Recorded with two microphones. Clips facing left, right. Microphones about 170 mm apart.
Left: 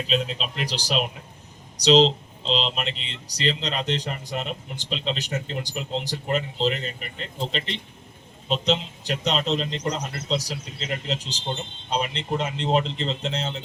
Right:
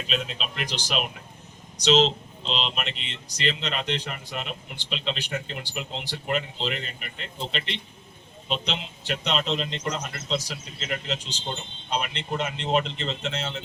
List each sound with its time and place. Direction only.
0.1 s speech: 30° left (ahead or behind)
8.4 s speech: 40° left (ahead or behind)